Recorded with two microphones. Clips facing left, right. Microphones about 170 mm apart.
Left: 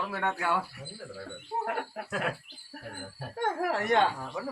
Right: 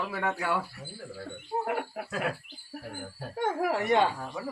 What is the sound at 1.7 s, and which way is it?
Speech, 10° right (ahead or behind).